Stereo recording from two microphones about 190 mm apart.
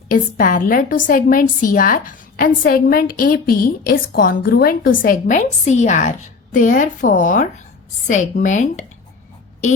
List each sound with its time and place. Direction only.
0.1 s a woman's voice: 50° left (ahead or behind)